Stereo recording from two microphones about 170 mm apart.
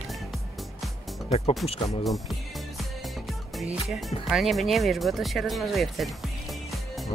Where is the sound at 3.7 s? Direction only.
Centre (ahead or behind).